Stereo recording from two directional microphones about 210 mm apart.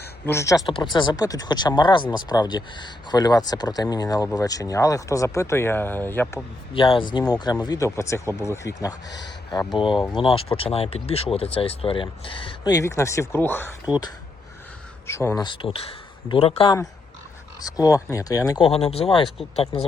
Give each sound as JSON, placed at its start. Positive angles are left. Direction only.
{"t": 0.0, "sound": "speech", "side_deg": 10}
{"t": 6.7, "sound": "speech", "side_deg": 25}
{"t": 15.0, "sound": "speech", "side_deg": 10}
{"t": 15.4, "sound": "speech", "side_deg": 25}
{"t": 17.6, "sound": "speech", "side_deg": 15}